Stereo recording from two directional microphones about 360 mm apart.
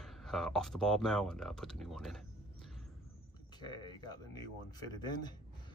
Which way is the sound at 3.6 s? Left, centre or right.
Centre.